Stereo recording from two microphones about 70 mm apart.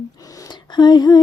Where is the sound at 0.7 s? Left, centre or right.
Left.